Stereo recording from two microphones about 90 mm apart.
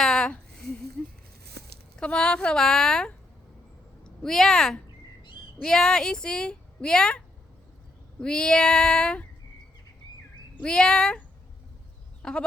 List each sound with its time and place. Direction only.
0.0 s a sound: 10° left (ahead or behind)
2.0 s a woman's voice: 10° left (ahead or behind)
8.2 s a woman's voice: 10° left (ahead or behind)
10.6 s a woman's voice: 10° left (ahead or behind)
12.2 s goat: 10° left (ahead or behind)